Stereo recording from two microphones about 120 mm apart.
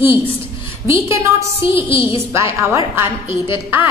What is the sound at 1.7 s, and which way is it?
Speech, 50° left (ahead or behind).